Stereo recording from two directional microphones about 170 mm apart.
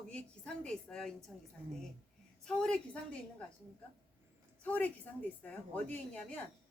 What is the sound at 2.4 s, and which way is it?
Speech, 5° left (ahead or behind).